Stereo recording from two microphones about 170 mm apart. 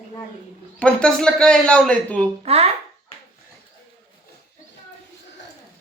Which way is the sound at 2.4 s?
35° right (ahead or behind).